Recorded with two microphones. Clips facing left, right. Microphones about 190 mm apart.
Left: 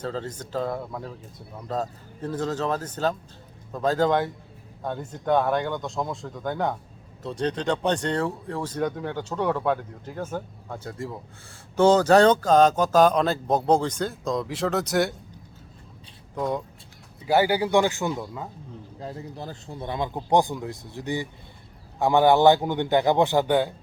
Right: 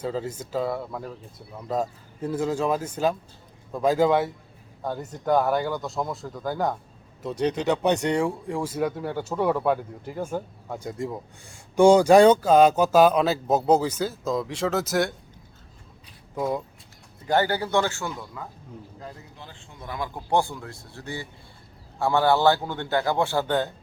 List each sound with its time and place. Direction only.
0.0 s speech: 10° right (ahead or behind)
16.3 s speech: 5° right (ahead or behind)
17.2 s speech: 10° left (ahead or behind)